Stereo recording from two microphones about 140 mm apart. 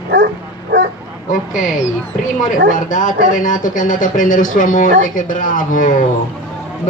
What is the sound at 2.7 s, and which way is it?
A man's voice, 70° left (ahead or behind).